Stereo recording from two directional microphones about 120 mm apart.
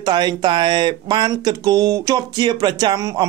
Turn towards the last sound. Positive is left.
turn(degrees=-30)  # may be behind; listen again after turning